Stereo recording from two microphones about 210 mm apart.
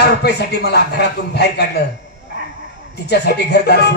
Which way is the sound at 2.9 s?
50° left (ahead or behind).